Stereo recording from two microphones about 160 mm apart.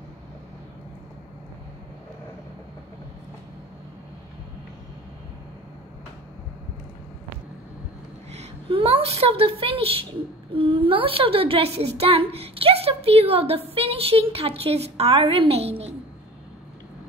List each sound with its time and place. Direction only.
8.3 s a woman's voice: 40° right (ahead or behind)